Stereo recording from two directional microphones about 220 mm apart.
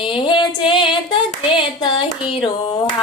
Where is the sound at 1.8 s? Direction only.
20° left (ahead or behind).